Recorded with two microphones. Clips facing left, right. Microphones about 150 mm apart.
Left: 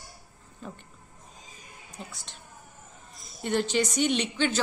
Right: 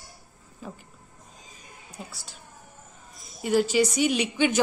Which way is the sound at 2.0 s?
5° right (ahead or behind).